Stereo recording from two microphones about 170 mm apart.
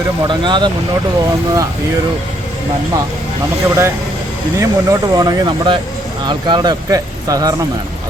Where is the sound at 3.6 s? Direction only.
15° right (ahead or behind).